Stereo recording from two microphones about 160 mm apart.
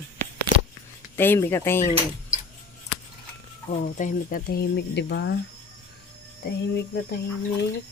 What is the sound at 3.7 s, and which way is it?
Speech, 50° left (ahead or behind).